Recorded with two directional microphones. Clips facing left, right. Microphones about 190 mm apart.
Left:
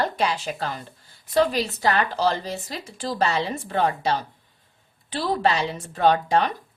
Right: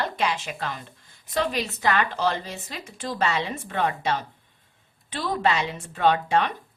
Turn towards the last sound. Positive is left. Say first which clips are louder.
# left 2 dB
turn(degrees=40)  # may be behind; listen again after turning